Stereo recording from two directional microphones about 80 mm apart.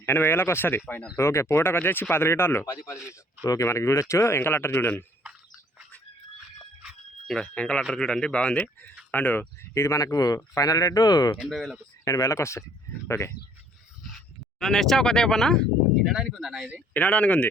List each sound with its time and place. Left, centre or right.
0.0 s speech: left
3.4 s speech: left
7.3 s speech: centre; by 11.3 s left
11.3 s speech: centre
12.0 s speech: left
14.6 s speech: centre
16.0 s speech: centre
16.4 s speech: centre
16.9 s speech: centre